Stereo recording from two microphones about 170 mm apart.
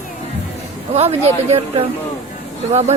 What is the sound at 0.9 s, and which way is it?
Speech, 40° right (ahead or behind).